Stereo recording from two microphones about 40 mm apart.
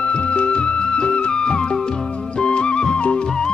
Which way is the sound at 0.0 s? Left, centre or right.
Left.